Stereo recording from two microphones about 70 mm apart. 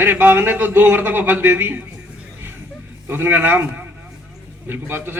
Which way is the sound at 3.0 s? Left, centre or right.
Right.